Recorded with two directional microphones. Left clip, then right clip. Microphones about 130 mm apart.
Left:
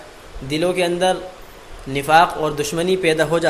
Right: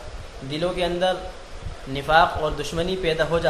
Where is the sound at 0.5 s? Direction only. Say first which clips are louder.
Left 5 dB; 55° left (ahead or behind).